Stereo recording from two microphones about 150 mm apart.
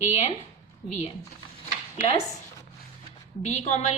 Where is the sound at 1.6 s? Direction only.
45° left (ahead or behind).